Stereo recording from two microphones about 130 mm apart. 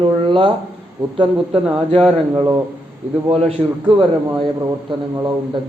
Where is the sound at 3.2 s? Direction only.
50° right (ahead or behind).